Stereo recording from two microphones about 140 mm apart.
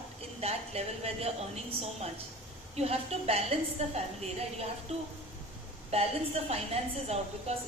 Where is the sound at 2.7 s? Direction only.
50° right (ahead or behind).